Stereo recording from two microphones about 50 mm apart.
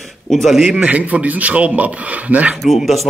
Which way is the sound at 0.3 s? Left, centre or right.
Centre.